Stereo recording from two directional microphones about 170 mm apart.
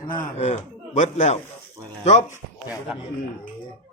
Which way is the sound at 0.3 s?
40° left (ahead or behind).